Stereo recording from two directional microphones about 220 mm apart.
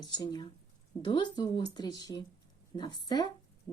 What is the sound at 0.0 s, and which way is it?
A woman's voice, 20° left (ahead or behind).